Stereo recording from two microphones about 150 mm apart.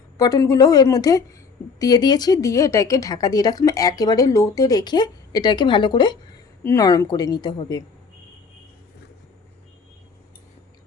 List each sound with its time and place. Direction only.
0.2 s speech: 25° left (ahead or behind)
6.6 s speech: 20° left (ahead or behind)